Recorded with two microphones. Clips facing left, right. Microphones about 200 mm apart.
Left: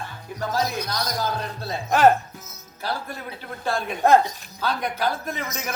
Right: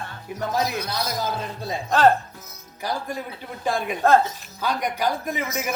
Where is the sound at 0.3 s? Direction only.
20° right (ahead or behind).